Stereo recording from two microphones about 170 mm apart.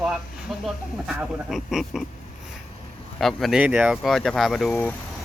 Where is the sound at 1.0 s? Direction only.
Centre (ahead or behind).